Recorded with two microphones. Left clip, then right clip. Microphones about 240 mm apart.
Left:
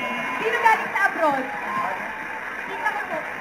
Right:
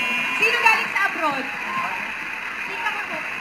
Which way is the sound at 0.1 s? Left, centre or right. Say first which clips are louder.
Right 5 dB; centre.